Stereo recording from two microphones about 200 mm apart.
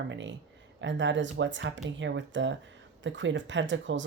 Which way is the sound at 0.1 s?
65° right (ahead or behind).